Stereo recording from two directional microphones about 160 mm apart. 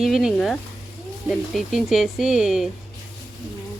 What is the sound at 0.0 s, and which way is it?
Speech, centre (ahead or behind).